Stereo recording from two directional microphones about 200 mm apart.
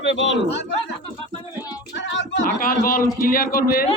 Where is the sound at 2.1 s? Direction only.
65° left (ahead or behind).